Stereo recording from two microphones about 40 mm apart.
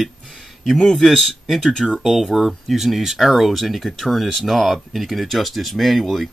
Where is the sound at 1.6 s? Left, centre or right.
Centre.